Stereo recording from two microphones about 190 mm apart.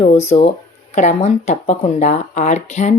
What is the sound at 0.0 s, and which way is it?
Speech, 35° left (ahead or behind).